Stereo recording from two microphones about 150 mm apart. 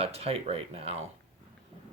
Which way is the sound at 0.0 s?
40° right (ahead or behind).